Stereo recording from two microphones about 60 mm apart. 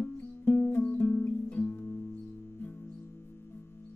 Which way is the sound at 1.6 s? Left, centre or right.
Left.